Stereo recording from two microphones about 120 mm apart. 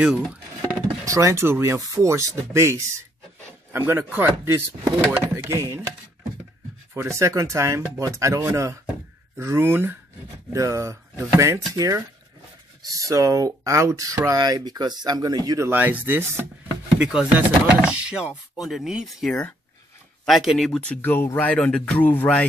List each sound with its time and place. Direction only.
1.0 s speech: 25° right (ahead or behind)
6.9 s speech: 25° right (ahead or behind)
13.1 s speech: 30° right (ahead or behind)
15.7 s speech: 15° right (ahead or behind); by 20.8 s centre (ahead or behind)
20.9 s speech: 15° left (ahead or behind)